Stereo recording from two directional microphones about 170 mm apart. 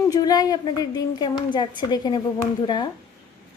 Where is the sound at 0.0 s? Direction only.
20° left (ahead or behind).